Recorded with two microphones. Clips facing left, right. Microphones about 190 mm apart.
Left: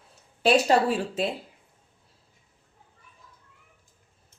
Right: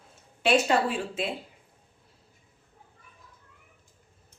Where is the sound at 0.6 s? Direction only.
40° left (ahead or behind).